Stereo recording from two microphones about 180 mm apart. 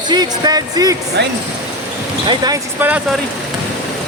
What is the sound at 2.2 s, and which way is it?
Speech, 20° right (ahead or behind).